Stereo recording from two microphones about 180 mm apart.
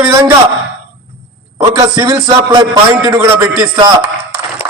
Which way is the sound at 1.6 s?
20° right (ahead or behind).